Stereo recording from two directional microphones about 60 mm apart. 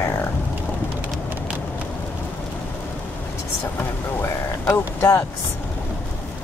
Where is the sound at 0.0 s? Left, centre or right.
Left.